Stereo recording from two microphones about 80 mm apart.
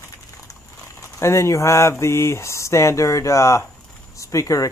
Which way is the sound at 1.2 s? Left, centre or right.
Left.